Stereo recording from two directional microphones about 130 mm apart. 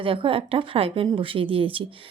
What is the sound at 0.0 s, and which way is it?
A woman's voice, 45° right (ahead or behind).